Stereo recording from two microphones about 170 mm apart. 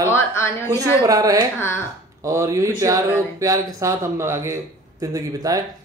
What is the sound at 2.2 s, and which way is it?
Speech, 20° right (ahead or behind).